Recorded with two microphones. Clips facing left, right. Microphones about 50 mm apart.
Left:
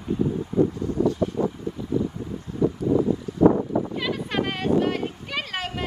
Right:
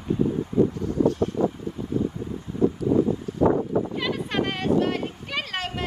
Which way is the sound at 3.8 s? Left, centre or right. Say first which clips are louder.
Even; centre.